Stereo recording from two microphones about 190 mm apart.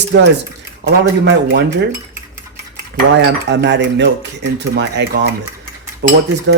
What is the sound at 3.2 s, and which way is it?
Speech, 70° right (ahead or behind).